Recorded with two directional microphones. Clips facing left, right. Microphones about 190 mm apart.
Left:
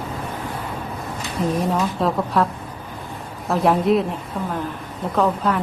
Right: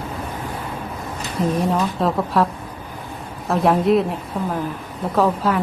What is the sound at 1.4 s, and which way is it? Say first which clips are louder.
A woman's voice: right 1 dB; centre (ahead or behind).